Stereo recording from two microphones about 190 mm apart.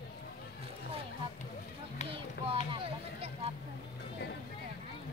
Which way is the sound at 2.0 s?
30° right (ahead or behind).